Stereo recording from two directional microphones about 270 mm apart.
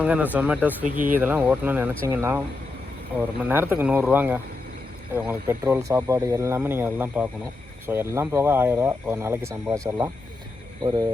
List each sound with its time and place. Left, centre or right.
0.0 s speech: centre